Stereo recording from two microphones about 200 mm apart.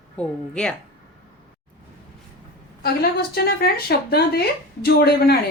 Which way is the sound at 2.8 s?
50° left (ahead or behind).